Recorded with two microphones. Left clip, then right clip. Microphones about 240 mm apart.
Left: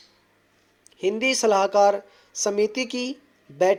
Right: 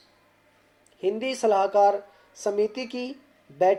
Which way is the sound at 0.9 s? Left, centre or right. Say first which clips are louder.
Left 4 dB; left.